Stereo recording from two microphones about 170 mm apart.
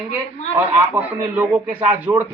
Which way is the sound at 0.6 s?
10° right (ahead or behind).